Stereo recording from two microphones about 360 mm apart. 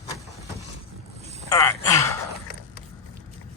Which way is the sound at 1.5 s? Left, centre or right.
Centre.